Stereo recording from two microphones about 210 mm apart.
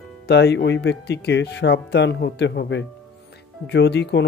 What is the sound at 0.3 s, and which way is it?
Speech, 55° left (ahead or behind).